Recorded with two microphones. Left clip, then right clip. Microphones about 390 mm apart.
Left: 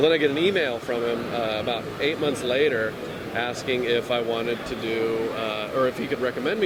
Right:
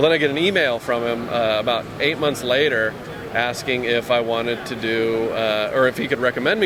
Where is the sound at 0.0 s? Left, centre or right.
Right.